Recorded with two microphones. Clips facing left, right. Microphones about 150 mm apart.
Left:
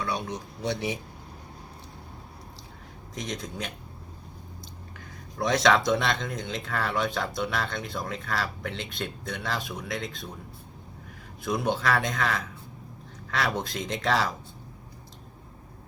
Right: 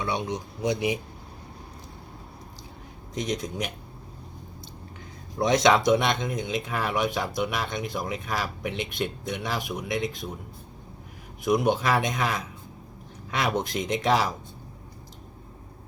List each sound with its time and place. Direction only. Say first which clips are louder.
0.0 s speech: right 2 dB; 20° right (ahead or behind)
3.2 s speech: right 5 dB; 15° right (ahead or behind)
5.4 s speech: right 2 dB; 20° right (ahead or behind)
11.4 s speech: right 4 dB; 15° right (ahead or behind)